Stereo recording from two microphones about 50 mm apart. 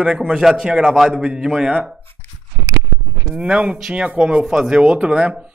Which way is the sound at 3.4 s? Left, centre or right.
Right.